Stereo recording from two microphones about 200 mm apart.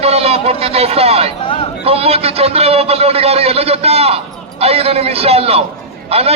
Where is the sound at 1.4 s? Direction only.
25° left (ahead or behind).